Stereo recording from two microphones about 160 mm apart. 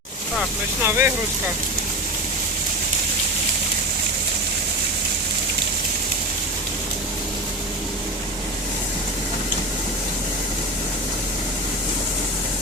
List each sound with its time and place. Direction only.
0.9 s speech: 15° right (ahead or behind)